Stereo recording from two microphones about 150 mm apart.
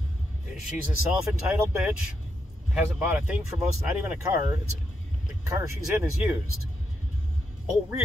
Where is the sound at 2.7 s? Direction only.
10° right (ahead or behind).